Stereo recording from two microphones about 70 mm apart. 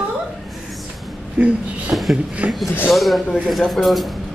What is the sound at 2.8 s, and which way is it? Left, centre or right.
Speech, centre.